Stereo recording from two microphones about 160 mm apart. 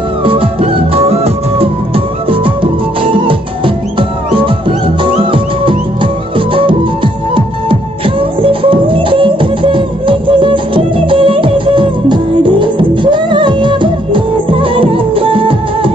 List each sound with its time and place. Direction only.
0.2 s music: 35° right (ahead or behind)